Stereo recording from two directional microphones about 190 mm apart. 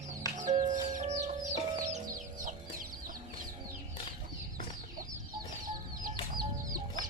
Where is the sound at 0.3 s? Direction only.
40° right (ahead or behind).